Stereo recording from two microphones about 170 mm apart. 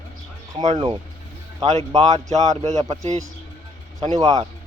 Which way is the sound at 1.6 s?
40° right (ahead or behind).